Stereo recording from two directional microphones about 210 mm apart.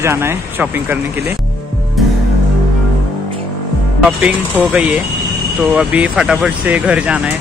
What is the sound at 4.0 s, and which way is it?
Speech, 5° right (ahead or behind).